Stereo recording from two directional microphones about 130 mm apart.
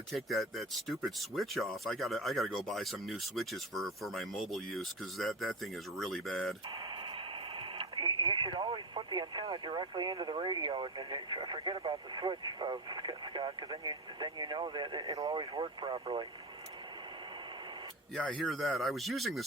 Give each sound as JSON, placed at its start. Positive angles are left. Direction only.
{"t": 0.1, "sound": "speech", "side_deg": 0}
{"t": 7.8, "sound": "speech", "side_deg": -40}
{"t": 18.1, "sound": "speech", "side_deg": 5}